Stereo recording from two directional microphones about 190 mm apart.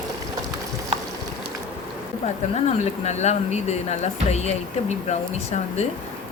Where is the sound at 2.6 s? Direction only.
35° left (ahead or behind).